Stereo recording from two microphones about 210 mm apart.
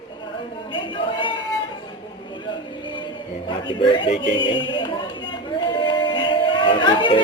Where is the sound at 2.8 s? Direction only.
20° left (ahead or behind).